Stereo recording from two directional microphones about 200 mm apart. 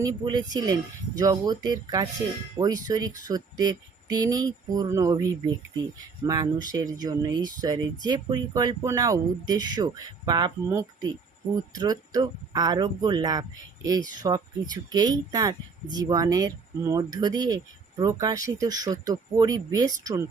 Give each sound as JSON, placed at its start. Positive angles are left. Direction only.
{"t": 0.0, "sound": "speech", "side_deg": -20}